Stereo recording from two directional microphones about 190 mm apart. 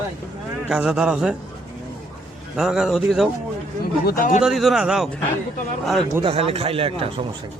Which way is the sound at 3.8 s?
50° left (ahead or behind).